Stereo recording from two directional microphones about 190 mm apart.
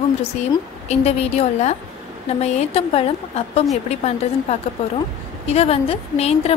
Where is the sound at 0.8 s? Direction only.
35° left (ahead or behind).